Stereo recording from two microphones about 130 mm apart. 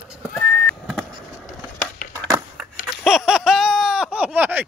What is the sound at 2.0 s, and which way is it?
Crushing, 90° left.